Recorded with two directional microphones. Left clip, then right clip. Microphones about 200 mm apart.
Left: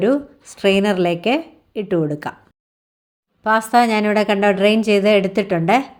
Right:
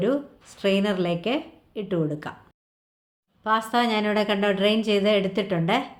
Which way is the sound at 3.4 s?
40° left (ahead or behind).